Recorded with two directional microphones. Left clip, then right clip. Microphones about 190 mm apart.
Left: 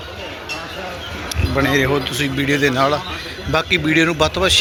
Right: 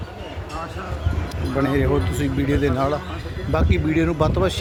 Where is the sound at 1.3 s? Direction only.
10° right (ahead or behind).